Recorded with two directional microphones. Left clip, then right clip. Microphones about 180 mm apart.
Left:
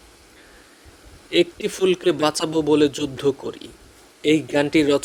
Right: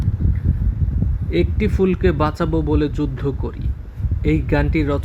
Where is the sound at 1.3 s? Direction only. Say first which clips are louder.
Left 1 dB; 40° left (ahead or behind).